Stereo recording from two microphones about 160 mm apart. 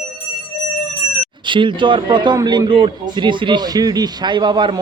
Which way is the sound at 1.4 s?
30° right (ahead or behind).